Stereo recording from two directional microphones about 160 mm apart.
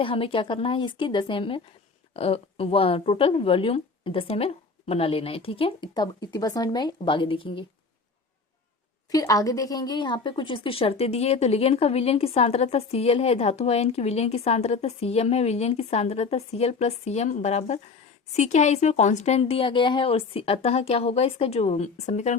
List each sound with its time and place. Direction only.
0.0 s a woman's voice: 35° left (ahead or behind)
9.0 s a woman's voice: 20° left (ahead or behind); by 22.4 s 45° left (ahead or behind)